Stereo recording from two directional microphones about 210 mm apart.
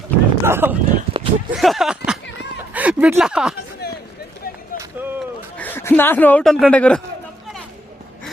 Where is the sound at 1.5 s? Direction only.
Centre (ahead or behind).